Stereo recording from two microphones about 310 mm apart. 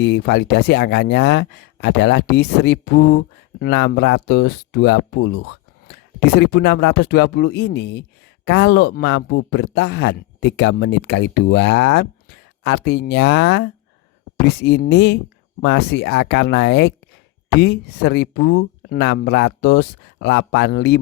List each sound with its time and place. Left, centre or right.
0.0 s speech: left